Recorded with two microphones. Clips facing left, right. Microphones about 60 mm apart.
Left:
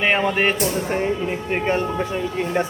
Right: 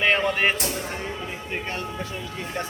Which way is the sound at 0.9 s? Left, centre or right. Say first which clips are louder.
Left 10 dB; left.